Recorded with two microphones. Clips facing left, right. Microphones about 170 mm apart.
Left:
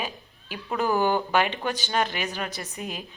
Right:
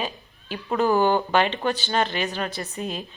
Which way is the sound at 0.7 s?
20° right (ahead or behind).